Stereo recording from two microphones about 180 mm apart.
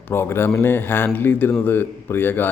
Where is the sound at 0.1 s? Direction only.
15° left (ahead or behind).